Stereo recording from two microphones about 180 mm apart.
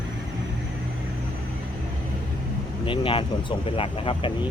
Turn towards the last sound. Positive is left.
turn(degrees=30)  # may be behind; listen again after turning